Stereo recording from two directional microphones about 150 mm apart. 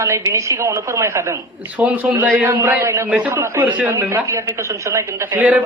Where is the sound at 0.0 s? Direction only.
20° right (ahead or behind).